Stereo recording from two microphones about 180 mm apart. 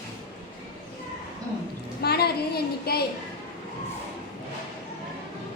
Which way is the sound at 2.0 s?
60° left (ahead or behind).